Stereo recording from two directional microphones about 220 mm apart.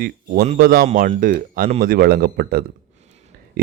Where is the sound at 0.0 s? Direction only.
40° right (ahead or behind).